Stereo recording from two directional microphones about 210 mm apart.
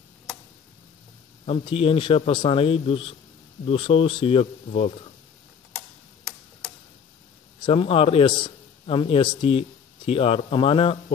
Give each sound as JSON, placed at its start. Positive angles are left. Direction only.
{"t": 1.4, "sound": "a man's voice", "side_deg": 25}
{"t": 7.6, "sound": "a man's voice", "side_deg": 25}